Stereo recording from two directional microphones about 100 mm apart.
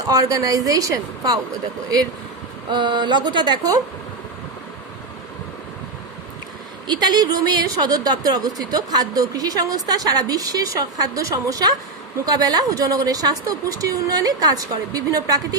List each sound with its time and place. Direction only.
0.1 s a woman's voice: 35° right (ahead or behind)
2.6 s speech: 50° right (ahead or behind)
6.8 s a woman's voice: 45° right (ahead or behind)